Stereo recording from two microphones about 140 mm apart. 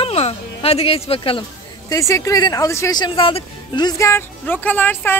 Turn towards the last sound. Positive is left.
turn(degrees=15)  # may be behind; listen again after turning